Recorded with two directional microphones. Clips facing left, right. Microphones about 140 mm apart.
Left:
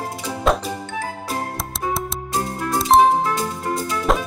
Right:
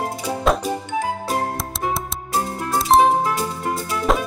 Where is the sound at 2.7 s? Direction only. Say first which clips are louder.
Even; centre (ahead or behind).